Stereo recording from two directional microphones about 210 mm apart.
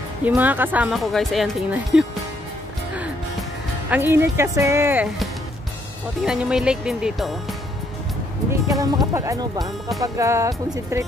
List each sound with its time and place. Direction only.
0.2 s speech: 10° right (ahead or behind)
3.9 s speech: 10° right (ahead or behind)
8.5 s speech: 15° right (ahead or behind)